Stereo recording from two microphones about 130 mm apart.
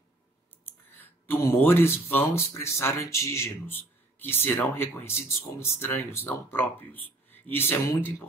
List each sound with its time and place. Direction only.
0.7 s speech: 15° left (ahead or behind)